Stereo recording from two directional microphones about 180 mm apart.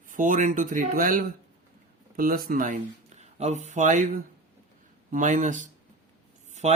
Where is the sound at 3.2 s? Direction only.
40° right (ahead or behind).